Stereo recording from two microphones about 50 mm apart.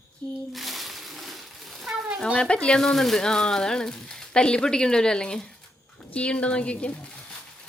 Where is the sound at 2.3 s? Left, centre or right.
Centre.